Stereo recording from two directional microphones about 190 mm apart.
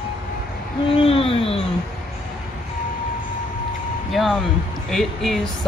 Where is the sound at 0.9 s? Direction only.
30° left (ahead or behind).